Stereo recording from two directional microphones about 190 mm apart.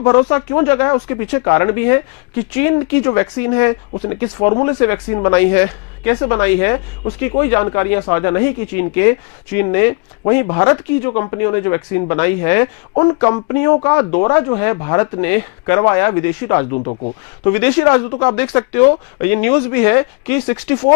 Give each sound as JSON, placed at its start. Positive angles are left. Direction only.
{"t": 0.0, "sound": "speech", "side_deg": 20}
{"t": 16.7, "sound": "speech", "side_deg": 35}
{"t": 17.4, "sound": "speech", "side_deg": 15}